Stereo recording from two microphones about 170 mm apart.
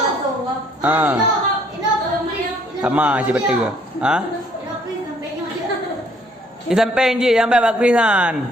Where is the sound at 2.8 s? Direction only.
10° right (ahead or behind).